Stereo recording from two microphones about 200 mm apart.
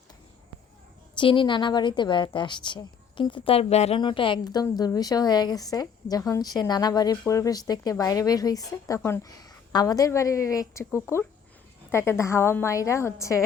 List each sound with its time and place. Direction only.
1.1 s a woman's voice: 25° left (ahead or behind)